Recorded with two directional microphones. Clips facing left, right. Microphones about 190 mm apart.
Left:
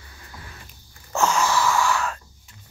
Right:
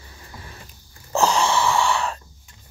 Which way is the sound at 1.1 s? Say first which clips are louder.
Right 2 dB; 35° right (ahead or behind).